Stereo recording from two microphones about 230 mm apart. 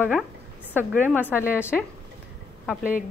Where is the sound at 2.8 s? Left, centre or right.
Left.